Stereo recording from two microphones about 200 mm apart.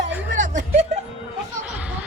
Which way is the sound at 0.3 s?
40° right (ahead or behind).